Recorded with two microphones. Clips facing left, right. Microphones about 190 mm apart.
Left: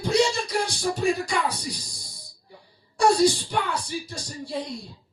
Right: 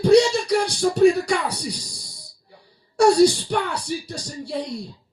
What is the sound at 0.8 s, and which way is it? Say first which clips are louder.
Speech: right 10 dB; 65° right (ahead or behind).